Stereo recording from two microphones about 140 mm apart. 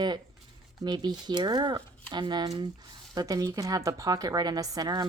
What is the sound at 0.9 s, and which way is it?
Speech, 30° right (ahead or behind).